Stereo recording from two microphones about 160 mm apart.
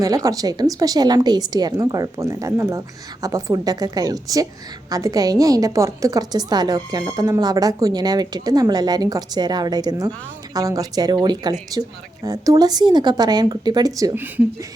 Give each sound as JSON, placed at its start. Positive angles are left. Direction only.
{"t": 0.0, "sound": "a woman's voice", "side_deg": -20}